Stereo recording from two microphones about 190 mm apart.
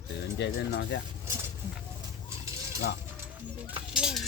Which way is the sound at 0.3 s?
65° left (ahead or behind).